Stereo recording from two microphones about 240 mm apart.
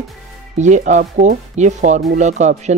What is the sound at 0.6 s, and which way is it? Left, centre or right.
Speech, right.